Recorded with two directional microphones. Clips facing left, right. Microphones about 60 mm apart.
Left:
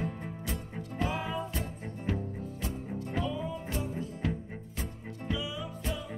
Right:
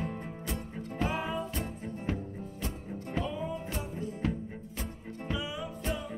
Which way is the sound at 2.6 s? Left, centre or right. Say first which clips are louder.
Left 1 dB; centre.